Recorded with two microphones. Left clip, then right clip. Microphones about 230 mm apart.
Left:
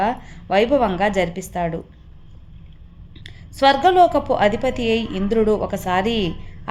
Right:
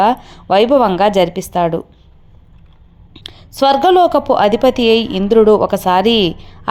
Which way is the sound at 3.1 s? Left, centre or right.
Right.